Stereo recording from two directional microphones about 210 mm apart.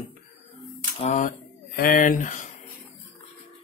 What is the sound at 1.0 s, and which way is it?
Speech, 40° left (ahead or behind).